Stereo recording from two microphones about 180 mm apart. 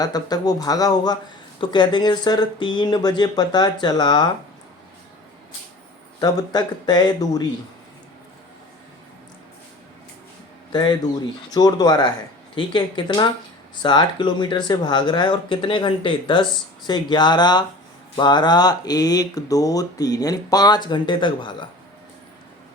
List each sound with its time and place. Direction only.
0.0 s speech: 20° left (ahead or behind)
6.1 s speech: 20° left (ahead or behind)
10.7 s a man's voice: 25° left (ahead or behind)